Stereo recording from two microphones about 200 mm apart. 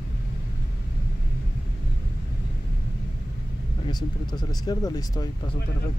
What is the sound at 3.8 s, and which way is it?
Speech, 20° left (ahead or behind).